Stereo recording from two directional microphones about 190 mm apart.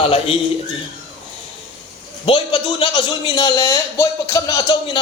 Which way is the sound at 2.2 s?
30° left (ahead or behind).